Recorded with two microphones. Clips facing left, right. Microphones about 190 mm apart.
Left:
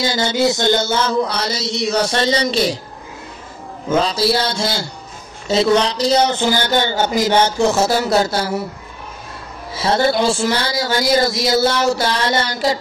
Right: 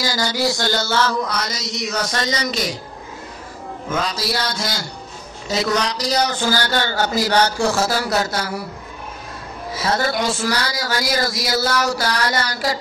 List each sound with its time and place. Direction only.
0.0 s speech: 25° left (ahead or behind)
3.9 s speech: 30° left (ahead or behind)
9.8 s speech: 30° left (ahead or behind)